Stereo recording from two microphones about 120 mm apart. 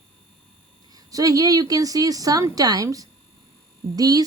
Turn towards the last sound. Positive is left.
turn(degrees=-30)  # may be behind; listen again after turning